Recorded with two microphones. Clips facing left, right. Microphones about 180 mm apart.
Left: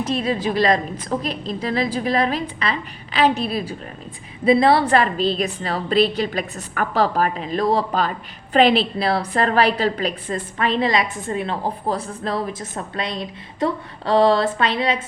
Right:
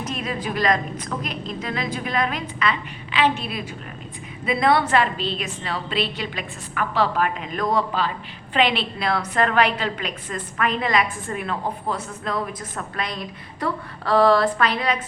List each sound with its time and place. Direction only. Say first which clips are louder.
0.0 s a woman's voice: left 6 dB; 30° left (ahead or behind)